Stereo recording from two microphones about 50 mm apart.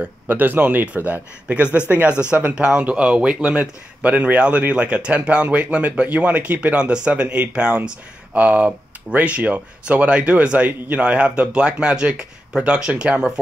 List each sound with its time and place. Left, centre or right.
0.0 s a man's voice: right